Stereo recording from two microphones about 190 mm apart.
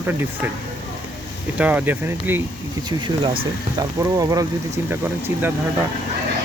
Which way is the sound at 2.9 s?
25° right (ahead or behind).